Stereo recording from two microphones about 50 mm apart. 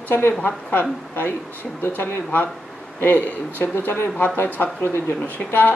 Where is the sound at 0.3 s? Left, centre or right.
Left.